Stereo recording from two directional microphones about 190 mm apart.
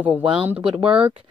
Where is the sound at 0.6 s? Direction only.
30° right (ahead or behind).